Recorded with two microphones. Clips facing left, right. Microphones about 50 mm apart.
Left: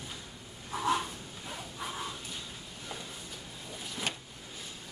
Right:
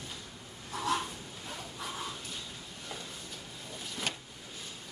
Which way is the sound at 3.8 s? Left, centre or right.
Centre.